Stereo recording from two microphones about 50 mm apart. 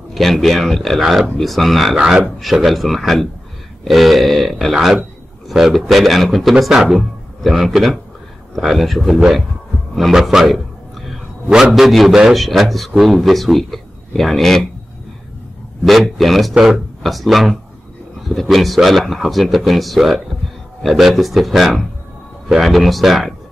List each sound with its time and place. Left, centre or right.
0.1 s a man's voice: centre
10.1 s a sound: centre
11.4 s a man's voice: centre
11.7 s speech: centre
15.8 s speech: centre